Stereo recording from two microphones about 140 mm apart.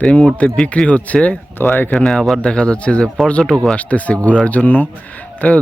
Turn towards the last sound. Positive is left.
turn(degrees=10)  # may be behind; listen again after turning